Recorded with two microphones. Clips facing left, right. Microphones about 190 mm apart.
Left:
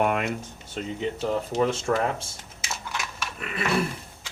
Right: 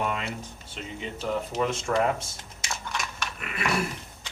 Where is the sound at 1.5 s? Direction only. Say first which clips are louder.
Left 5 dB; 35° left (ahead or behind).